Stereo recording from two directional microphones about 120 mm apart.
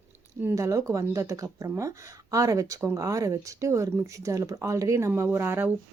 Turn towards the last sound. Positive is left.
turn(degrees=-20)  # may be behind; listen again after turning